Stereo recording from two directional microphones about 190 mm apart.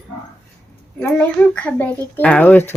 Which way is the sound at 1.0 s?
10° left (ahead or behind).